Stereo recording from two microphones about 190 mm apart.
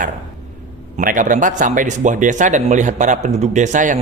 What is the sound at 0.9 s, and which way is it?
Speech, 40° right (ahead or behind).